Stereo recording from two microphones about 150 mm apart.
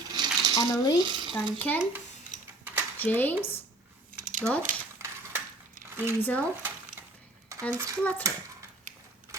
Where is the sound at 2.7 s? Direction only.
10° right (ahead or behind).